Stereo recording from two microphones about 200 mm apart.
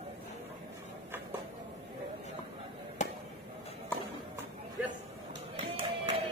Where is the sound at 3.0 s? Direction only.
35° left (ahead or behind).